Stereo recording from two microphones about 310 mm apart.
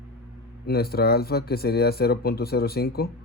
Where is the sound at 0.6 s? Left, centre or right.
Left.